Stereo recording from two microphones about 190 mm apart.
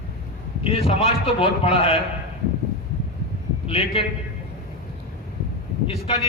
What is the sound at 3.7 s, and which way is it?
Speech, 30° left (ahead or behind).